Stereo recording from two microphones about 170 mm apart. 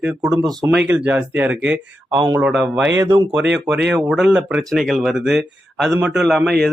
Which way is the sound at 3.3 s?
90° right.